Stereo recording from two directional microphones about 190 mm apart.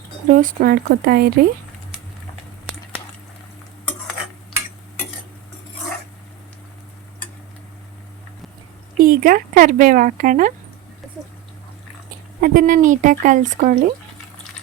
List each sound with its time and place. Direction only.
0.3 s speech: 45° right (ahead or behind)
9.0 s speech: 45° right (ahead or behind)
12.4 s speech: 45° right (ahead or behind)